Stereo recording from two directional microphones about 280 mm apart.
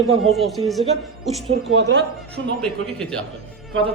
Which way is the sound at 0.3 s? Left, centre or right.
Centre.